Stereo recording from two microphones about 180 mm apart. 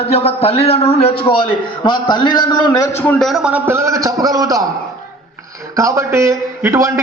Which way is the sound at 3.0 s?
5° left (ahead or behind).